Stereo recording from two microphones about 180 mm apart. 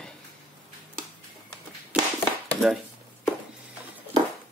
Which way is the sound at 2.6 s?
5° left (ahead or behind).